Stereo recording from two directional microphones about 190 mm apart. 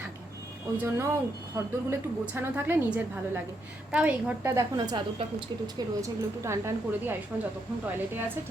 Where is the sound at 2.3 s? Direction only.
10° right (ahead or behind).